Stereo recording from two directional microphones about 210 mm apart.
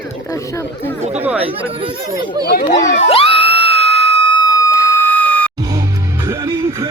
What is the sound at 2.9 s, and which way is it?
Speech, 30° left (ahead or behind).